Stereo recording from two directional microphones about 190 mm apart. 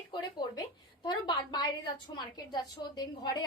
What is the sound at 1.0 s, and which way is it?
A woman's voice, 25° left (ahead or behind).